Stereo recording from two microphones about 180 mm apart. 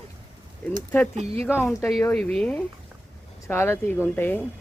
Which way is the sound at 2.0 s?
10° left (ahead or behind).